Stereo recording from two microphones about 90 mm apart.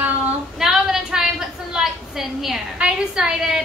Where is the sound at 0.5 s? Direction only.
5° right (ahead or behind).